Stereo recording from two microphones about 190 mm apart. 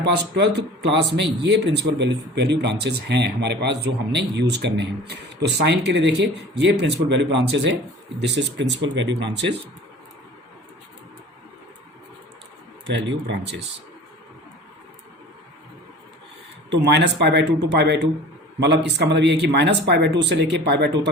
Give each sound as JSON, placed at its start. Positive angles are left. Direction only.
{"t": 0.3, "sound": "a man's voice", "side_deg": -65}
{"t": 13.0, "sound": "speech", "side_deg": -70}
{"t": 16.6, "sound": "a man's voice", "side_deg": -65}